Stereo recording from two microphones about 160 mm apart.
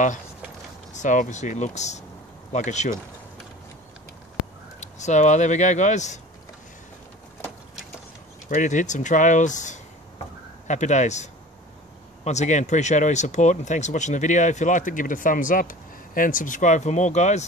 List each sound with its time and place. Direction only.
0.9 s speech: 50° left (ahead or behind)
4.7 s speech: 45° left (ahead or behind)
8.5 s speech: 50° left (ahead or behind)
12.3 s speech: 45° left (ahead or behind)